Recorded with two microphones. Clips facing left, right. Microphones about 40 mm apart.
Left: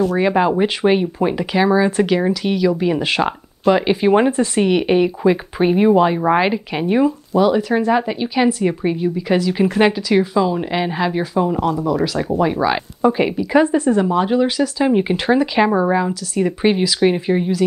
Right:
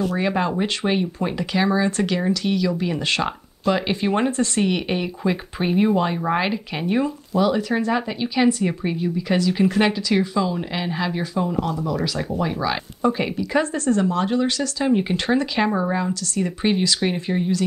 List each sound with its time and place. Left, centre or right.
0.0 s speech: centre